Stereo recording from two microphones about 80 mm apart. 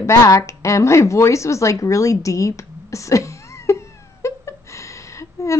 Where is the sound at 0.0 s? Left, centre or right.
Left.